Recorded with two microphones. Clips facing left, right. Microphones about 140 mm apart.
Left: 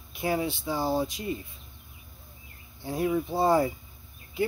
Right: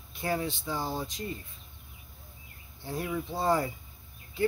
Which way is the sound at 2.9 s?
20° left (ahead or behind).